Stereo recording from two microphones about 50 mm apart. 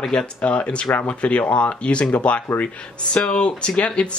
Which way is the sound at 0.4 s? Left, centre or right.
Left.